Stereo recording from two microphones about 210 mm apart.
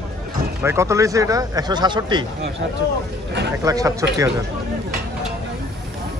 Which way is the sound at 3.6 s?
15° right (ahead or behind).